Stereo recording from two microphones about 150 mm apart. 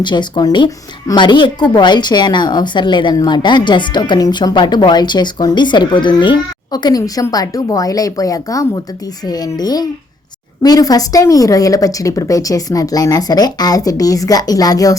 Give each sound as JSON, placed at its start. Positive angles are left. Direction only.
{"t": 0.0, "sound": "speech", "side_deg": 30}